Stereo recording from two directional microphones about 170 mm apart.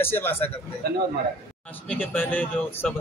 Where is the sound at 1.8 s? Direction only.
10° left (ahead or behind).